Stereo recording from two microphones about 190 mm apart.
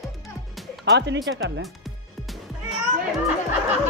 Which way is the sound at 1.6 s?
Centre (ahead or behind).